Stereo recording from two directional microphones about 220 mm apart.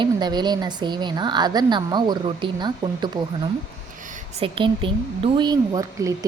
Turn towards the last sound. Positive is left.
turn(degrees=-15)  # may be behind; listen again after turning